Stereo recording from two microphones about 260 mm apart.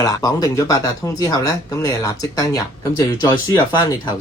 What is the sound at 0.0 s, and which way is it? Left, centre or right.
Speech, centre.